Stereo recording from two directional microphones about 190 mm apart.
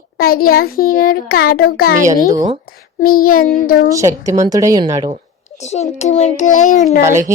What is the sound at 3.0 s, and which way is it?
Speech, 50° left (ahead or behind).